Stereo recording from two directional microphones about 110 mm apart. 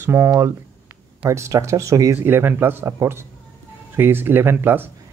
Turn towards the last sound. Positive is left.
turn(degrees=-20)  # may be behind; listen again after turning